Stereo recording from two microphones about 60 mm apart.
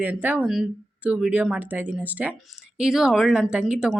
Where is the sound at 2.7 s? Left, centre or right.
Centre.